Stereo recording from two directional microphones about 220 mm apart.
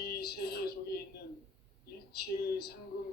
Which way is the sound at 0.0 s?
45° left (ahead or behind).